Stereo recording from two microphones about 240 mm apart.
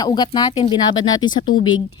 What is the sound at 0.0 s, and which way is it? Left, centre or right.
A woman's voice, centre.